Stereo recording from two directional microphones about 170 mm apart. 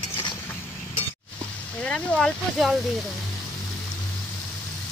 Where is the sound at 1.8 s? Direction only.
5° left (ahead or behind).